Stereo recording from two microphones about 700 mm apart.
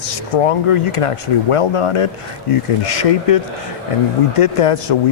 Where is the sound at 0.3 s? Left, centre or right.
Left.